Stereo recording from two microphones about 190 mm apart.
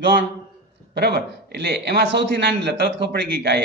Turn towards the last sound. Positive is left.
turn(degrees=-60)  # may be behind; listen again after turning